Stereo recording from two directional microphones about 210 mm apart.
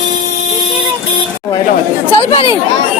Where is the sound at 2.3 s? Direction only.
25° left (ahead or behind).